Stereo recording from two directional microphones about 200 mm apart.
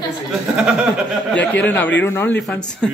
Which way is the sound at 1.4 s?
10° left (ahead or behind).